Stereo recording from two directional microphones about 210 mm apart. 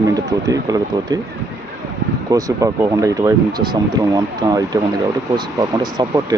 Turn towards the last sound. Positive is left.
turn(degrees=-20)  # may be behind; listen again after turning